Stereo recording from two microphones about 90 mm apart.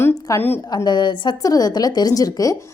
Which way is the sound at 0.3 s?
25° left (ahead or behind).